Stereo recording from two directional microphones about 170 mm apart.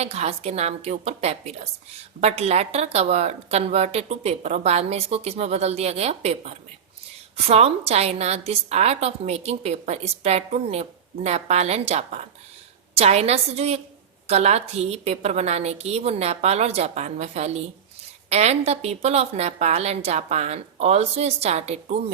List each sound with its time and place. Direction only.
0.0 s a woman's voice: 40° right (ahead or behind)